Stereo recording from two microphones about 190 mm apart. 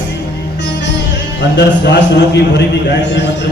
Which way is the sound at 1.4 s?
65° left (ahead or behind).